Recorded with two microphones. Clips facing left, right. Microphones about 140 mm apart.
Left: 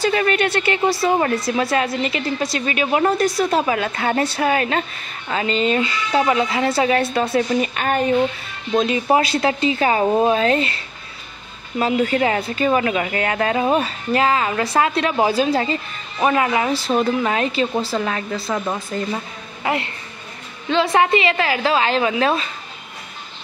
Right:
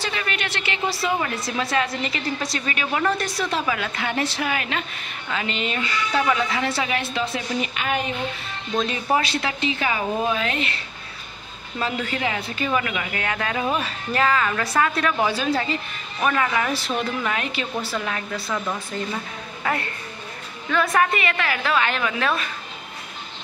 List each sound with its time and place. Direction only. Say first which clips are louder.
0.0 s a woman's voice: left 10 dB; 40° left (ahead or behind)
3.1 s speech: left 6 dB; 45° left (ahead or behind)
3.6 s speech: left 5 dB; 30° left (ahead or behind)
9.1 s speech: left 5 dB; 30° left (ahead or behind)
11.8 s a woman's voice: left 8 dB; 35° left (ahead or behind)
16.2 s a woman's voice: left 4 dB; 25° left (ahead or behind)
16.8 s speech: left 7 dB; 35° left (ahead or behind)
19.6 s a woman's voice: left 4 dB; 20° left (ahead or behind)